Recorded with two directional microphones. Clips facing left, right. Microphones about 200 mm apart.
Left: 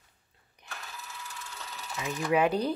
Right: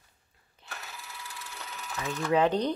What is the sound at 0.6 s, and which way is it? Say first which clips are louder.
Sewing machine: right 1 dB; 15° left (ahead or behind).